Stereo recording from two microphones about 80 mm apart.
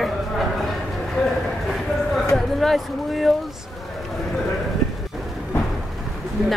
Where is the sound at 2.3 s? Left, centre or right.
Centre.